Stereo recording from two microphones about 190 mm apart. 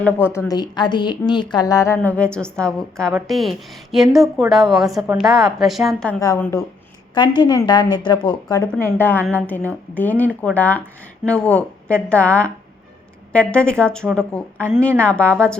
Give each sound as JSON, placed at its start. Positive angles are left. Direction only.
{"t": 0.3, "sound": "a woman's voice", "side_deg": 20}
{"t": 2.0, "sound": "a woman's voice", "side_deg": 5}
{"t": 6.1, "sound": "a woman's voice", "side_deg": 15}
{"t": 8.6, "sound": "a woman's voice", "side_deg": 5}